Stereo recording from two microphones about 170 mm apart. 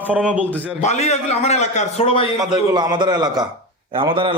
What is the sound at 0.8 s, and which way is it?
A man's voice, 40° left (ahead or behind).